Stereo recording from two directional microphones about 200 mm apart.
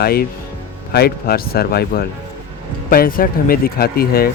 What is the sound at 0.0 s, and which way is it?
Speech, 50° left (ahead or behind).